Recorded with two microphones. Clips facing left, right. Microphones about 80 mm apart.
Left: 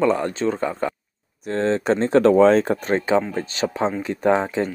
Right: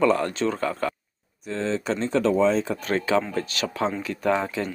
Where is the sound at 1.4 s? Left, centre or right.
Left.